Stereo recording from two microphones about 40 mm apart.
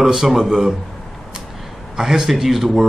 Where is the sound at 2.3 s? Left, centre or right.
Centre.